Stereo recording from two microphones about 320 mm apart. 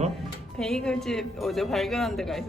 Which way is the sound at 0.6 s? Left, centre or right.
Centre.